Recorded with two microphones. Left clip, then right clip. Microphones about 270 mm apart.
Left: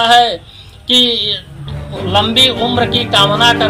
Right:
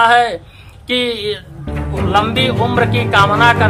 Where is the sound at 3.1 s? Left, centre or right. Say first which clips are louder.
Even; right.